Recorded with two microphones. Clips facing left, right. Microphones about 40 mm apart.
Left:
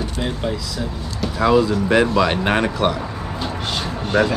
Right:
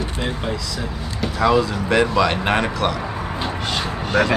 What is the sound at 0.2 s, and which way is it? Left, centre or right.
Speech, centre.